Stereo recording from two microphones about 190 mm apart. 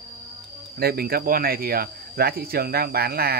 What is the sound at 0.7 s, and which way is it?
Speech, 55° right (ahead or behind).